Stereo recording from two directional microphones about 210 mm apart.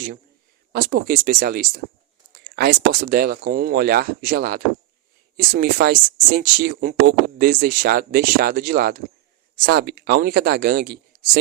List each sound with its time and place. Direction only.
0.7 s speech: 45° right (ahead or behind)